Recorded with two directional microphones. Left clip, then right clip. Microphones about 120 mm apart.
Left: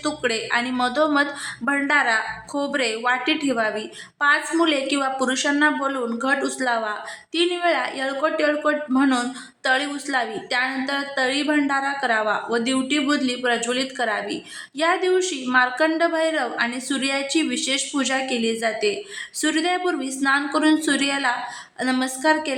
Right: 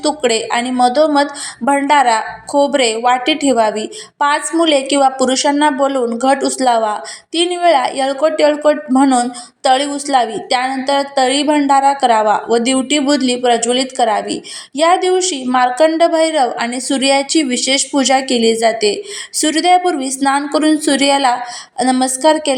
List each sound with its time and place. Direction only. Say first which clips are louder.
0.0 s speech: right 9 dB; 35° right (ahead or behind)